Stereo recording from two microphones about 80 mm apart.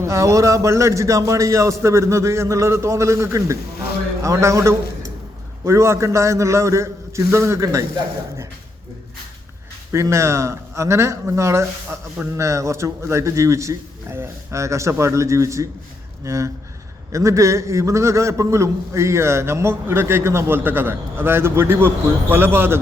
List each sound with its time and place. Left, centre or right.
0.0 s a man's voice: right
9.9 s a man's voice: right